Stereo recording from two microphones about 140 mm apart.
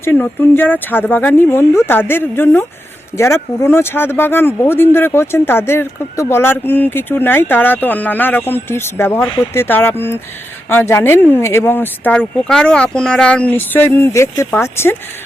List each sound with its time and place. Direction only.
0.0 s speech: 15° left (ahead or behind)